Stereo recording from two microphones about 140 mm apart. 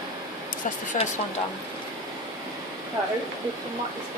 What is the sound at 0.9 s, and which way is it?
Speech, 55° left (ahead or behind).